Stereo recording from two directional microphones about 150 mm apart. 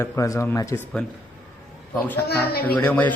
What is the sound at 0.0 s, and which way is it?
Speech, 20° left (ahead or behind).